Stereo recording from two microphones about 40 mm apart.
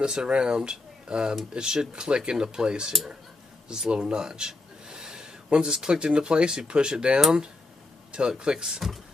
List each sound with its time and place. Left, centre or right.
0.0 s speech: right
8.4 s speech: centre